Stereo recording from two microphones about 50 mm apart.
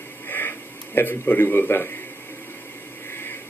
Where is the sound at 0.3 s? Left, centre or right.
Left.